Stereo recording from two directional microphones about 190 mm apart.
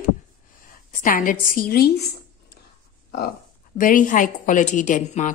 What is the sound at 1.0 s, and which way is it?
Speech, 45° left (ahead or behind).